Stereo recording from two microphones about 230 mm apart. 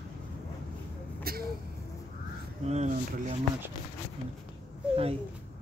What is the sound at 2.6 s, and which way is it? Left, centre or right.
Speech, right.